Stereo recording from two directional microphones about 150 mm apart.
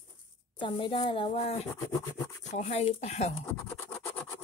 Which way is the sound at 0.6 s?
35° left (ahead or behind).